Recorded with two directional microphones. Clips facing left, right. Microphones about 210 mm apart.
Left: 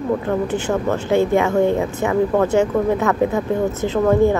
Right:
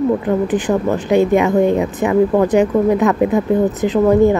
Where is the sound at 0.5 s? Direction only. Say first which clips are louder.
Right 4 dB; 15° right (ahead or behind).